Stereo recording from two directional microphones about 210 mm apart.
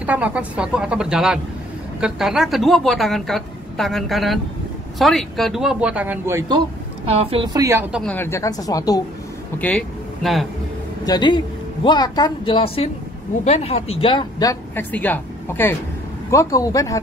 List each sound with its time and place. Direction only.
0.0 s a woman's voice: 5° right (ahead or behind)
7.2 s a woman's voice: 25° right (ahead or behind)
7.9 s speech: 5° left (ahead or behind)
9.6 s speech: 5° left (ahead or behind)
11.1 s speech: 20° left (ahead or behind)